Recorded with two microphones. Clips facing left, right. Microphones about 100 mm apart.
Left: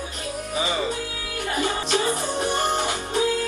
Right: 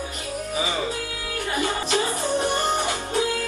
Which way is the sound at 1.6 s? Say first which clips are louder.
Left 1 dB; 20° left (ahead or behind).